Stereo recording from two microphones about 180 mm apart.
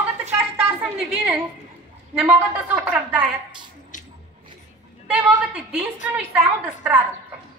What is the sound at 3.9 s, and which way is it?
Squish, 45° left (ahead or behind).